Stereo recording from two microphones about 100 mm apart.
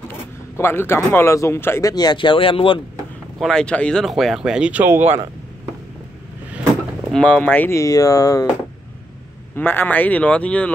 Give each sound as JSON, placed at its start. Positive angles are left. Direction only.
{"t": 0.6, "sound": "speech", "side_deg": 25}
{"t": 1.9, "sound": "speech", "side_deg": 40}
{"t": 3.3, "sound": "speech", "side_deg": 5}
{"t": 4.0, "sound": "speech", "side_deg": 0}
{"t": 7.1, "sound": "speech", "side_deg": 5}
{"t": 7.7, "sound": "speech", "side_deg": 35}
{"t": 9.6, "sound": "speech", "side_deg": 20}